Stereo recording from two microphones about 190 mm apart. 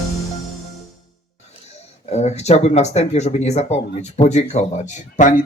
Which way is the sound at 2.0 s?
35° left (ahead or behind).